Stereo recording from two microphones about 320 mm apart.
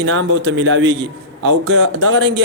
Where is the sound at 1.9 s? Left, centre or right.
Right.